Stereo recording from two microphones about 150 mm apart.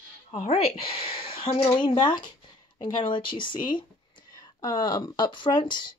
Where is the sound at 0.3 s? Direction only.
40° left (ahead or behind).